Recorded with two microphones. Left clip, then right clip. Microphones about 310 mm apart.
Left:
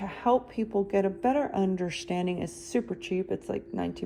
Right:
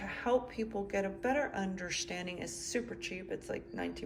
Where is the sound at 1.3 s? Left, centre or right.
Centre.